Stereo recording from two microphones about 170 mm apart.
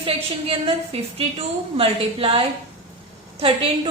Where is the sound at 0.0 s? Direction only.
30° right (ahead or behind).